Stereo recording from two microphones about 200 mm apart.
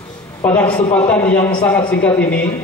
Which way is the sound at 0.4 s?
5° left (ahead or behind).